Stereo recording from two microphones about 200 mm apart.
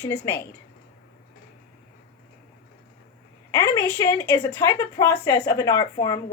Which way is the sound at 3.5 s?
15° left (ahead or behind).